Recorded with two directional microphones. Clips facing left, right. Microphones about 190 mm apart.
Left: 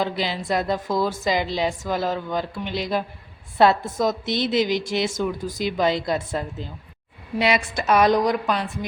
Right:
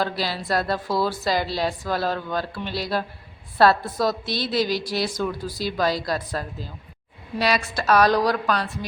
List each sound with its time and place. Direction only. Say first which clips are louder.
0.0 s a woman's voice: left 1 dB; 20° left (ahead or behind)